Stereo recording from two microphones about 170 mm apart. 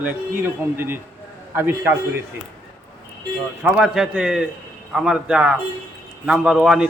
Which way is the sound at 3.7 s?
5° right (ahead or behind).